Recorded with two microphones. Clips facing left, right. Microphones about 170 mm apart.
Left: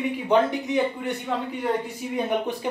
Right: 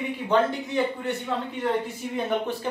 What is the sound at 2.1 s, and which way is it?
Speech, 15° left (ahead or behind).